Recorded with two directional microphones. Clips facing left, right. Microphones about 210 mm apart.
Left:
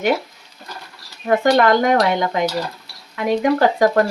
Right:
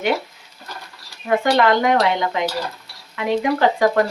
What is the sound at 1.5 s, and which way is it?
Speech, 45° left (ahead or behind).